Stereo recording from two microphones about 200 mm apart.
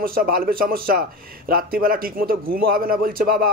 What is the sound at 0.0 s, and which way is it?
Speech, 45° right (ahead or behind).